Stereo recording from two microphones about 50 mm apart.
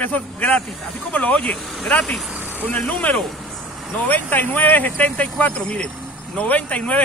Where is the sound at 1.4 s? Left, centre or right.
Centre.